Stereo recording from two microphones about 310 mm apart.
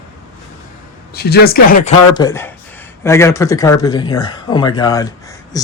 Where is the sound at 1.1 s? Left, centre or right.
Left.